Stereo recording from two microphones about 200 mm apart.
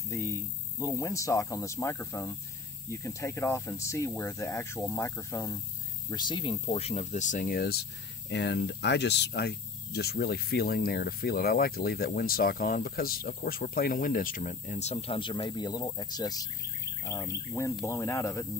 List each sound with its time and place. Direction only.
0.1 s speech: 15° left (ahead or behind)